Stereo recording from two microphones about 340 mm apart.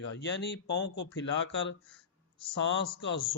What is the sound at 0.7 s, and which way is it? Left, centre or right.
Speech, left.